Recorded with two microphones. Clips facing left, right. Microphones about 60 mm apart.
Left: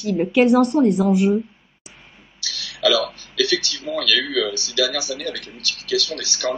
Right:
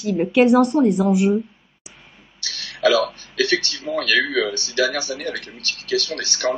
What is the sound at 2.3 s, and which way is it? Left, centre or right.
Speech, right.